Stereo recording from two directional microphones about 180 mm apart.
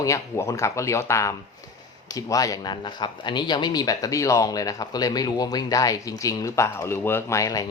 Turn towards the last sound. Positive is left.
turn(degrees=20)  # may be behind; listen again after turning